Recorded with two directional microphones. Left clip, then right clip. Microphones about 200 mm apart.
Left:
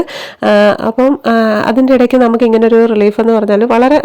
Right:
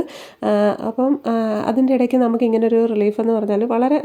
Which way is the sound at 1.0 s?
20° left (ahead or behind).